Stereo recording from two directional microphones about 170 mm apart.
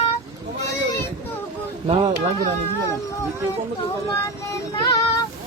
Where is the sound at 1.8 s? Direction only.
25° right (ahead or behind).